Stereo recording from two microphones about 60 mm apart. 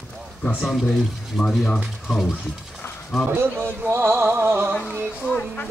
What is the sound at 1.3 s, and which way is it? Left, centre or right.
Speech, centre.